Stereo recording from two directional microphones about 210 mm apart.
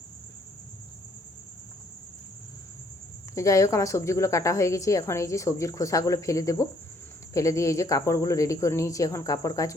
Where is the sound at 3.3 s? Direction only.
15° left (ahead or behind).